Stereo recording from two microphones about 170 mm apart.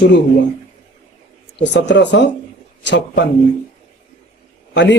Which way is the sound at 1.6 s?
90° left.